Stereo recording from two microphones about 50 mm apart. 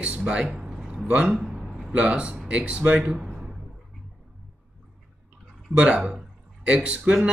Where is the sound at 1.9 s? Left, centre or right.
Right.